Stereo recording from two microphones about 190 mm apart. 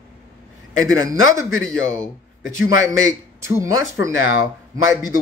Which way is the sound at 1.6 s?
5° left (ahead or behind).